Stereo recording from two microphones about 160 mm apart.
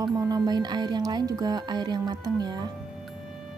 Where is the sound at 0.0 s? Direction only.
25° right (ahead or behind).